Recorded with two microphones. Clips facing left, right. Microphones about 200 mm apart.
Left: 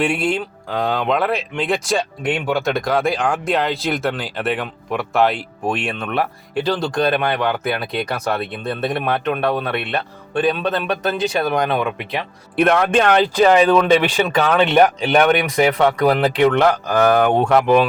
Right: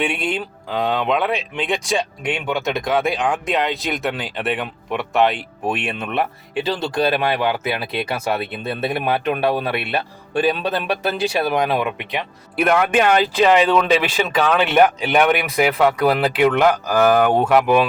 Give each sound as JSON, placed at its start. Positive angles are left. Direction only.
{"t": 0.0, "sound": "speech", "side_deg": 0}